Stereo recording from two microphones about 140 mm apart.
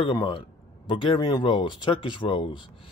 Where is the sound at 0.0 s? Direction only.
35° left (ahead or behind).